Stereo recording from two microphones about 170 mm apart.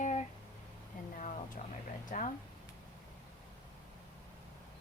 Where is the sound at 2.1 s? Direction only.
55° left (ahead or behind).